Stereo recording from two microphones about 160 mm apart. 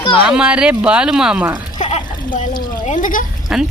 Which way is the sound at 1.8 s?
45° left (ahead or behind).